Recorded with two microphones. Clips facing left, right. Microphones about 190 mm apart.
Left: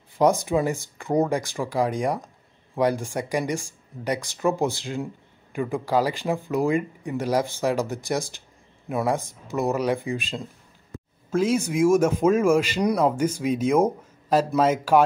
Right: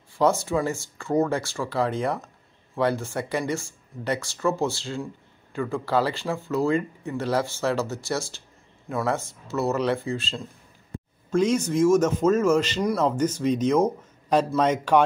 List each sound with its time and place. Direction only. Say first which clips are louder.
0.2 s speech: left 2 dB; 15° left (ahead or behind)